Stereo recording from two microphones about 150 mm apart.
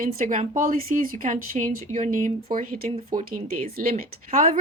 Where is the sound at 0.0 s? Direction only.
65° right (ahead or behind).